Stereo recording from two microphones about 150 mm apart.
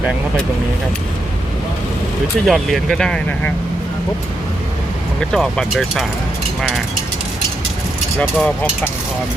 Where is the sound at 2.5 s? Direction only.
Centre (ahead or behind).